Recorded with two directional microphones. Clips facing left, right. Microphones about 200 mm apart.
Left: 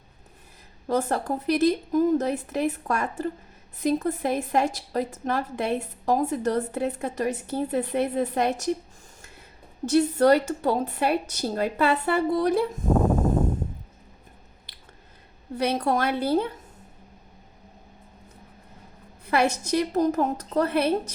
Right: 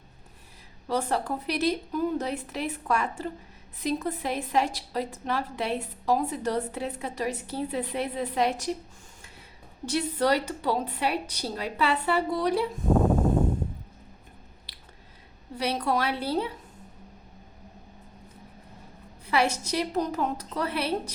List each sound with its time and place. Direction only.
0.9 s a woman's voice: 50° left (ahead or behind)
9.8 s a woman's voice: 45° left (ahead or behind)
15.5 s a woman's voice: 50° left (ahead or behind)
19.2 s a woman's voice: 50° left (ahead or behind)